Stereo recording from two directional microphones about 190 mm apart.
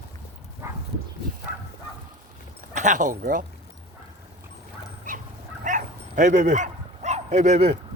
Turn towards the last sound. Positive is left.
turn(degrees=-35)  # may be behind; listen again after turning